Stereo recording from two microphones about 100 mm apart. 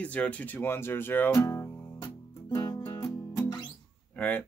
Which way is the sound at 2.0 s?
40° left (ahead or behind).